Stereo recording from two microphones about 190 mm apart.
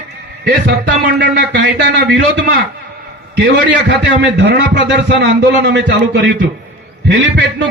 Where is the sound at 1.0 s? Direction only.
60° right (ahead or behind).